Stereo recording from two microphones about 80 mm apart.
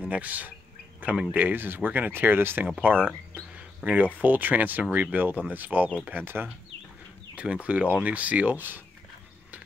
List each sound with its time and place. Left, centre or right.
0.1 s speech: centre
3.0 s speech: centre
3.5 s speech: centre
7.3 s speech: centre